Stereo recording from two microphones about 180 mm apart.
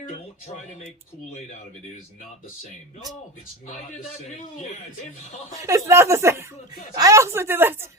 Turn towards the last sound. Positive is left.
turn(degrees=-10)  # may be behind; listen again after turning